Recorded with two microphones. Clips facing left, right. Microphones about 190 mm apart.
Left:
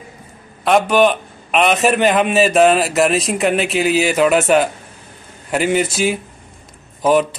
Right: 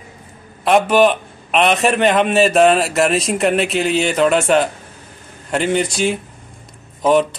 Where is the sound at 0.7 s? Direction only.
Centre (ahead or behind).